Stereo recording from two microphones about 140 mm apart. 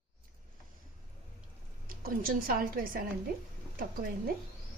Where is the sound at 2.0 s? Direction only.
90° right.